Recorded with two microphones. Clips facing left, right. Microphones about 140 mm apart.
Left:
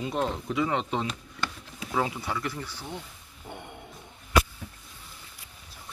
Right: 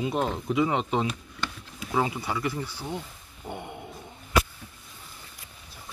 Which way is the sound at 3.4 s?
15° right (ahead or behind).